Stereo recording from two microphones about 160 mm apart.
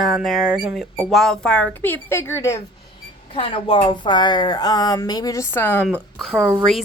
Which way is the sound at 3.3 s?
35° left (ahead or behind).